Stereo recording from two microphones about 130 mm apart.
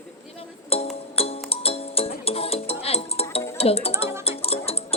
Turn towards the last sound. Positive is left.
turn(degrees=50)  # may be behind; listen again after turning